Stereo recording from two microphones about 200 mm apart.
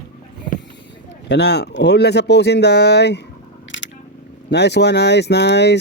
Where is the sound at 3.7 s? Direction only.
70° left (ahead or behind).